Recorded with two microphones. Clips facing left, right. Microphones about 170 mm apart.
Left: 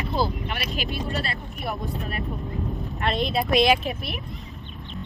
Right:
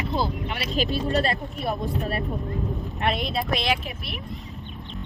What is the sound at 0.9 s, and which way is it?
Speech, 40° right (ahead or behind).